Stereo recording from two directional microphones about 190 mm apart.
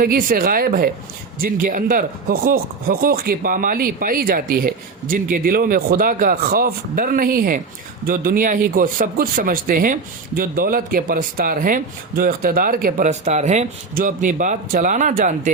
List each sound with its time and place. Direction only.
0.0 s speech: 50° right (ahead or behind)